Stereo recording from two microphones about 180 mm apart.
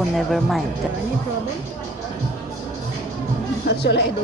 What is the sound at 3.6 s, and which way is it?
Speech, 65° left (ahead or behind).